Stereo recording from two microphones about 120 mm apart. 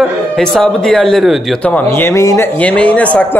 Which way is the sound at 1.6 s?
10° left (ahead or behind).